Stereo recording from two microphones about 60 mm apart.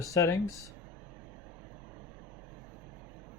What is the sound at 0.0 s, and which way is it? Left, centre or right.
Speech, left.